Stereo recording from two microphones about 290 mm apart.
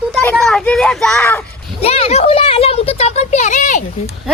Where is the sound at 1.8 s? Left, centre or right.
Left.